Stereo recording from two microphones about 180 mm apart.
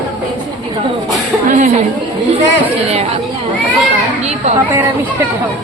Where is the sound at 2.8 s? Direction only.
35° right (ahead or behind).